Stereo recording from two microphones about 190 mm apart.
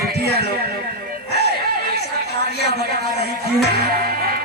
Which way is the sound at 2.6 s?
35° left (ahead or behind).